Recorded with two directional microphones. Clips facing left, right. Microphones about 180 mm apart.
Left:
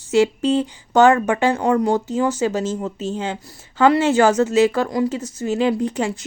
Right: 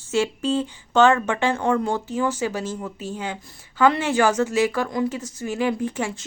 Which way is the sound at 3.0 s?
20° left (ahead or behind).